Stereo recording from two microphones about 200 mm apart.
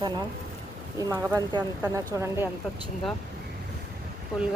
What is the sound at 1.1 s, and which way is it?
A woman's voice, 15° right (ahead or behind).